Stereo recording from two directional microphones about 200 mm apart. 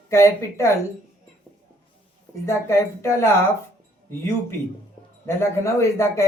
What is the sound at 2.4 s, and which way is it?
Speech, 15° left (ahead or behind).